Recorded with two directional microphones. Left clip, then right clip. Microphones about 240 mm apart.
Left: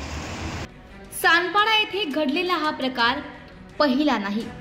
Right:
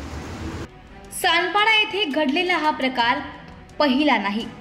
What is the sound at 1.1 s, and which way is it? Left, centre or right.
A woman's voice, centre.